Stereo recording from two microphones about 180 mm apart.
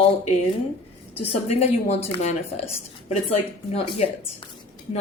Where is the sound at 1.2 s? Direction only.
35° left (ahead or behind).